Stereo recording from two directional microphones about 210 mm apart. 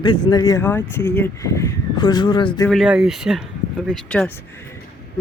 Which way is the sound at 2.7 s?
Centre (ahead or behind).